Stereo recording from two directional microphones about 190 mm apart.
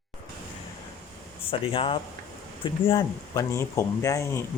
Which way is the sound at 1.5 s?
30° left (ahead or behind).